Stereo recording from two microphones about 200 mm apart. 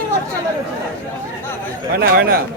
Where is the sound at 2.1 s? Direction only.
50° right (ahead or behind).